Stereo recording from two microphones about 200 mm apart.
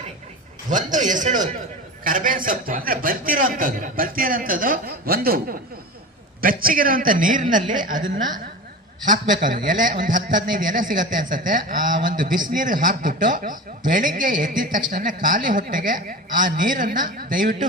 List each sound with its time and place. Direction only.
0.7 s a man's voice: 40° right (ahead or behind)
9.0 s a man's voice: 40° right (ahead or behind)